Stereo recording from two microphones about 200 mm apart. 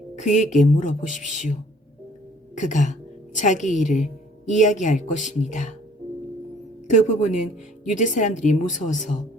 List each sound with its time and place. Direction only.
0.2 s speech: 35° left (ahead or behind)
2.6 s a woman's voice: 40° left (ahead or behind)
6.8 s speech: 35° left (ahead or behind)